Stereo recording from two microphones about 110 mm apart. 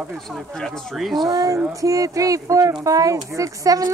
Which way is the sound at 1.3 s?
35° right (ahead or behind).